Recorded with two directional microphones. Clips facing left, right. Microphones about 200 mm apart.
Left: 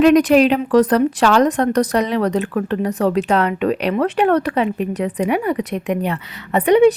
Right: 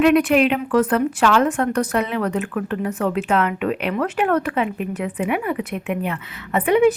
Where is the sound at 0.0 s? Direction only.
40° left (ahead or behind).